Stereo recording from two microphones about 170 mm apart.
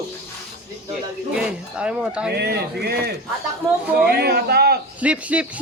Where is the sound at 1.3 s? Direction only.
5° right (ahead or behind).